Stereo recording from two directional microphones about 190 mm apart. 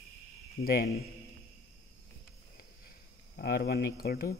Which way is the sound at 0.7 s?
50° left (ahead or behind).